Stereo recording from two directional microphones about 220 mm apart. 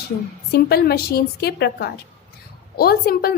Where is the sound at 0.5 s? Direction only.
45° left (ahead or behind).